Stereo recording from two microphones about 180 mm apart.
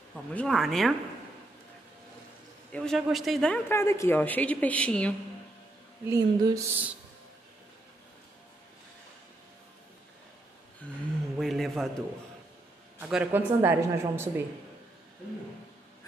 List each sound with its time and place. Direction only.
0.1 s speech: 5° left (ahead or behind)
2.7 s speech: 5° left (ahead or behind)
6.0 s speech: 20° right (ahead or behind)
11.3 s a sound: centre (ahead or behind)
13.1 s speech: 10° right (ahead or behind)